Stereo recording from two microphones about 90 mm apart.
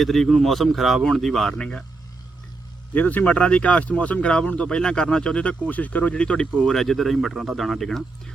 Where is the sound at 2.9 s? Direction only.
15° left (ahead or behind).